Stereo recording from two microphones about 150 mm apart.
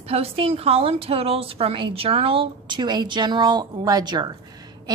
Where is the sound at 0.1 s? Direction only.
40° right (ahead or behind).